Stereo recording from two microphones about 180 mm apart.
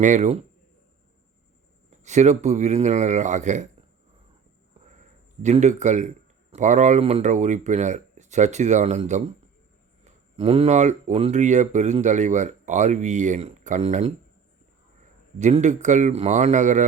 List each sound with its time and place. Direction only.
0.0 s speech: 40° right (ahead or behind)
2.0 s speech: 40° right (ahead or behind)
5.4 s speech: 40° right (ahead or behind)
15.4 s a man's voice: 40° right (ahead or behind)